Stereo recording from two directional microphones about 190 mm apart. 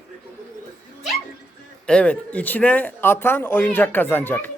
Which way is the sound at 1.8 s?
5° left (ahead or behind).